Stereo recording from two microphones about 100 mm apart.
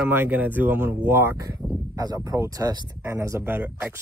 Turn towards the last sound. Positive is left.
turn(degrees=-25)  # may be behind; listen again after turning